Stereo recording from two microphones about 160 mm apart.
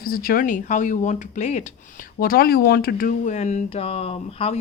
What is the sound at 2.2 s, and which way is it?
Speech, 70° left (ahead or behind).